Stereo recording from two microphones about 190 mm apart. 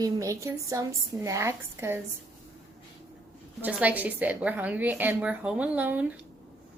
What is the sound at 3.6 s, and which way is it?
A woman's voice, 10° right (ahead or behind).